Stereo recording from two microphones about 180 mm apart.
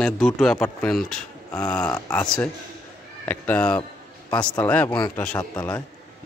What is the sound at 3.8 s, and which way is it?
Music, 25° left (ahead or behind).